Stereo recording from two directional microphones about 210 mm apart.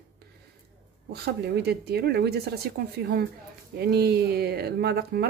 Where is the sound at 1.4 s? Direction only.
50° right (ahead or behind).